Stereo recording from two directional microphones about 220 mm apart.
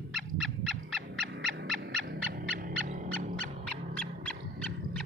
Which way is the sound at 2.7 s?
35° right (ahead or behind).